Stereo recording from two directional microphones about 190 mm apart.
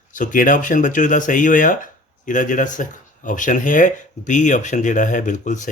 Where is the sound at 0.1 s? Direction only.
45° left (ahead or behind).